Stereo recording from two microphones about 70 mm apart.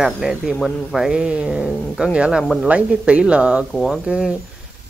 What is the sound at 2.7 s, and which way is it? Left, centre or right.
Speech, centre.